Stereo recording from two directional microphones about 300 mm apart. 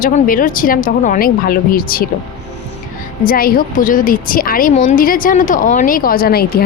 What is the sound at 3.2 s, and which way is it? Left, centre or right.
A woman's voice, left.